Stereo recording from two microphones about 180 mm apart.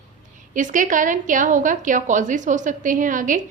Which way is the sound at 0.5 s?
45° right (ahead or behind).